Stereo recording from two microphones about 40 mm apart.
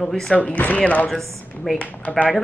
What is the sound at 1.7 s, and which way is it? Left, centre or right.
Speech, left.